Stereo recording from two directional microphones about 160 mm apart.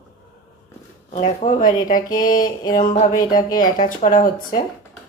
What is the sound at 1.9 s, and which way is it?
Speech, 60° left (ahead or behind).